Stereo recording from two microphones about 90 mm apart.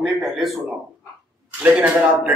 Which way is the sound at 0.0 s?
Centre (ahead or behind).